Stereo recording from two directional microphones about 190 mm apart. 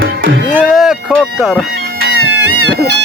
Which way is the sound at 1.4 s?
Centre (ahead or behind).